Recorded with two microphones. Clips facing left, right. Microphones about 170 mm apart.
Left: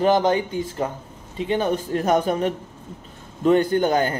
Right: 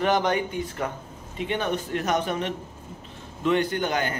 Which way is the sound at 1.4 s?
35° left (ahead or behind).